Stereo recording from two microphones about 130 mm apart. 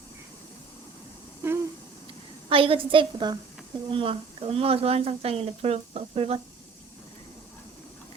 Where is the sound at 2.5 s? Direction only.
45° right (ahead or behind).